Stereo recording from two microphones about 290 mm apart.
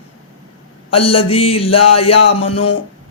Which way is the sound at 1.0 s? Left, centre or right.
Centre.